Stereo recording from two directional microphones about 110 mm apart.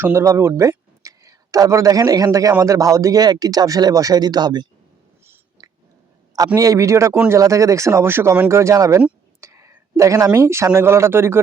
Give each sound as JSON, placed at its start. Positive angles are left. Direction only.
{"t": 0.0, "sound": "speech", "side_deg": -25}
{"t": 6.6, "sound": "speech", "side_deg": -30}
{"t": 9.4, "sound": "a sound", "side_deg": -25}
{"t": 10.3, "sound": "speech", "side_deg": -25}